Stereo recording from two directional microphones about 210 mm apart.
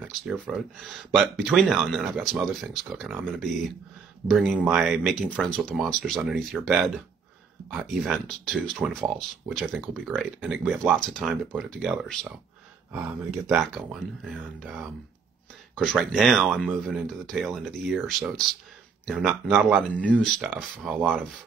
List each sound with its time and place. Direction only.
0.2 s speech: centre (ahead or behind)